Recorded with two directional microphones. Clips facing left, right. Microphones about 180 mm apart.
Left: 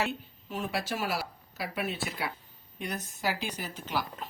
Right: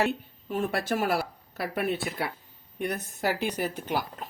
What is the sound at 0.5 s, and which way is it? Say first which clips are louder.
Speech: right 5 dB; 55° right (ahead or behind).